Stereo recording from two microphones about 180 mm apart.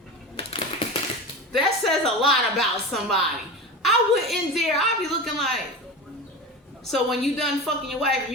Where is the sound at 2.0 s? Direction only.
Centre (ahead or behind).